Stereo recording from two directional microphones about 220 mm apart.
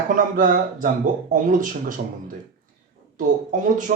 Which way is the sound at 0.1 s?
40° right (ahead or behind).